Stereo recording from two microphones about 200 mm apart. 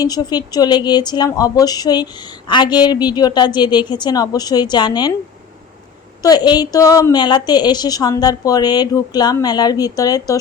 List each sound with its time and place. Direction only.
0.0 s speech: 20° left (ahead or behind)
6.2 s speech: 20° left (ahead or behind)